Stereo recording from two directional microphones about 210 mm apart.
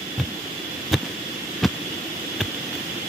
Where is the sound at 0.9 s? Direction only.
Centre (ahead or behind).